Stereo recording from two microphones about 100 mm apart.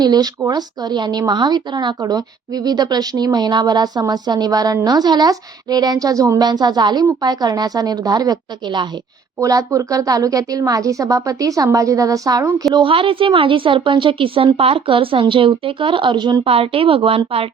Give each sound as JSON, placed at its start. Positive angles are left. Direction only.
{"t": 0.0, "sound": "a woman's voice", "side_deg": -40}
{"t": 6.5, "sound": "a woman's voice", "side_deg": -45}
{"t": 9.4, "sound": "speech", "side_deg": -35}
{"t": 12.7, "sound": "a woman's voice", "side_deg": -60}